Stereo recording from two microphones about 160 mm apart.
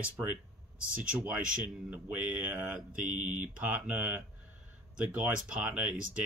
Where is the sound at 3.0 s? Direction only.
55° right (ahead or behind).